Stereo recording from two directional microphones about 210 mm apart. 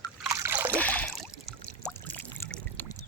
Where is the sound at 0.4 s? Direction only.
10° right (ahead or behind).